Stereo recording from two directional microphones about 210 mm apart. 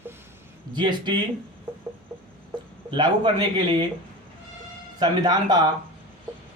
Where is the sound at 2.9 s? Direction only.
20° right (ahead or behind).